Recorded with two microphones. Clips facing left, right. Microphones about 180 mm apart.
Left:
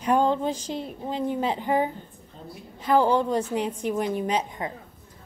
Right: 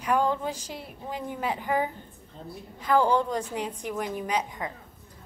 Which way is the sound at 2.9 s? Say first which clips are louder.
Left 2 dB; 20° left (ahead or behind).